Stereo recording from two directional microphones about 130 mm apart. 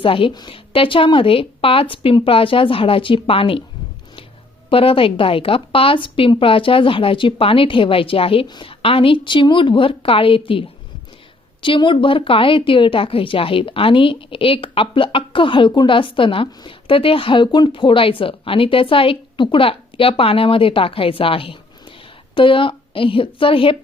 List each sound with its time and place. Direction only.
0.0 s a woman's voice: 40° left (ahead or behind)
4.7 s a woman's voice: 45° left (ahead or behind)